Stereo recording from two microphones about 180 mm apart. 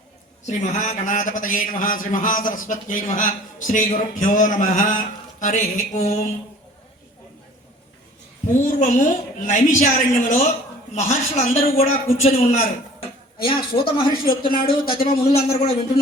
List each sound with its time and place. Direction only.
0.4 s a man's voice: 40° left (ahead or behind)
8.5 s a man's voice: 45° left (ahead or behind)